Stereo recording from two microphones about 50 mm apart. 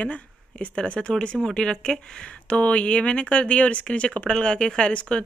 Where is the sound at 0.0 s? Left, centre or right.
Left.